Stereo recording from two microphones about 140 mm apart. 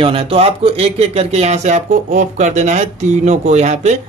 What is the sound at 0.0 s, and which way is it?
A man's voice, 40° right (ahead or behind).